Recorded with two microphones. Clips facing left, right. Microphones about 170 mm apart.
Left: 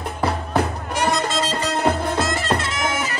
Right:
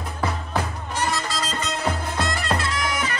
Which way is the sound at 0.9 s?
15° left (ahead or behind).